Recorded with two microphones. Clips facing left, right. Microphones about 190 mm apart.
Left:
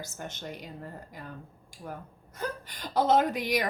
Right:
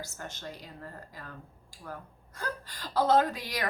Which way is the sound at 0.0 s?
20° left (ahead or behind).